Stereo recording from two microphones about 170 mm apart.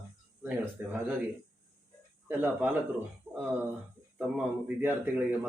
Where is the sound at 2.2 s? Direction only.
10° right (ahead or behind).